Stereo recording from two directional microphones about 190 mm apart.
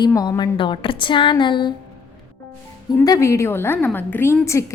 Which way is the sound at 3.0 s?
15° left (ahead or behind).